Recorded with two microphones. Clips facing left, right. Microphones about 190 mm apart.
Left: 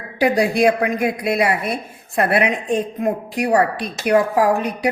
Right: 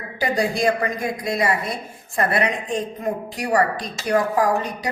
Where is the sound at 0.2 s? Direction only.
70° left (ahead or behind).